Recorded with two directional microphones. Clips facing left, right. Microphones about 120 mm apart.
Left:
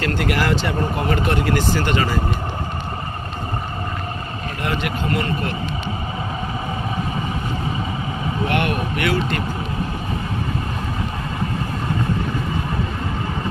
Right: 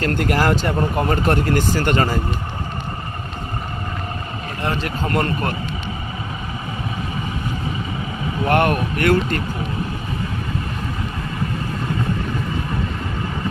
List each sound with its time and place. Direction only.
0.0 s speech: 45° right (ahead or behind)
5.0 s speech: 45° right (ahead or behind)
8.4 s speech: 45° right (ahead or behind)